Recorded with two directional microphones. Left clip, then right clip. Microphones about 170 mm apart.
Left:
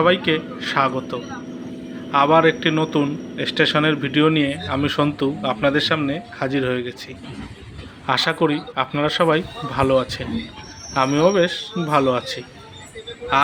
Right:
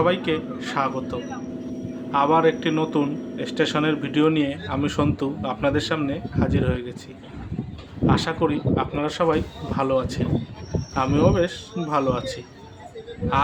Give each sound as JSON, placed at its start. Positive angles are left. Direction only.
{"t": 0.0, "sound": "a man's voice", "side_deg": 15}
{"t": 8.0, "sound": "speech", "side_deg": 20}